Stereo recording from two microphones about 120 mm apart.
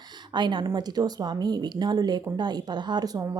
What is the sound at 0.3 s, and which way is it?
Speech, 40° right (ahead or behind).